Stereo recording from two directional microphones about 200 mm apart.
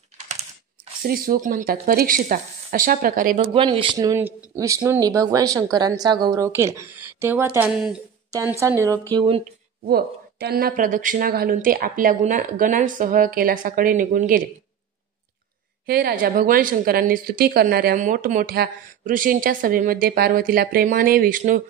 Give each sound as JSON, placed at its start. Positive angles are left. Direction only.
{"t": 1.0, "sound": "a woman's voice", "side_deg": -45}
{"t": 3.3, "sound": "speech", "side_deg": -25}
{"t": 8.3, "sound": "speech", "side_deg": -15}
{"t": 9.1, "sound": "speech", "side_deg": -25}
{"t": 9.8, "sound": "a woman's voice", "side_deg": -50}
{"t": 15.9, "sound": "a woman's voice", "side_deg": -45}